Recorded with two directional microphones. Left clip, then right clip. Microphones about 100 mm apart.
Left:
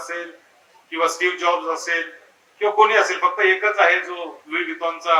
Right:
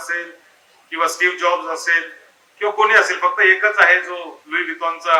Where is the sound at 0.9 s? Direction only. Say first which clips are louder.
Right 3 dB; 15° left (ahead or behind).